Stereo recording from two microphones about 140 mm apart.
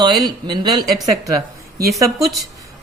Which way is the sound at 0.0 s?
30° right (ahead or behind).